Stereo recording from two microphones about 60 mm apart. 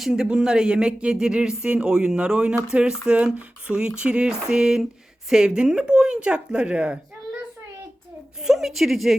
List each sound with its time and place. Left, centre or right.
0.0 s speech: centre
8.4 s a woman's voice: centre